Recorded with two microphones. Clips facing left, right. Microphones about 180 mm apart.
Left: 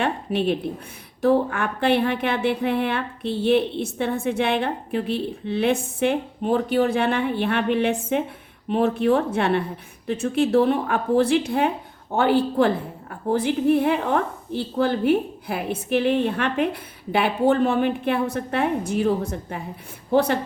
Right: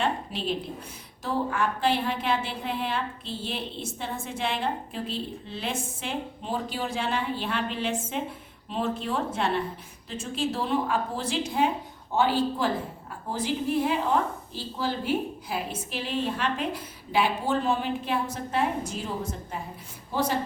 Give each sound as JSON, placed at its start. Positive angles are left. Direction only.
{"t": 0.0, "sound": "a woman's voice", "side_deg": 60}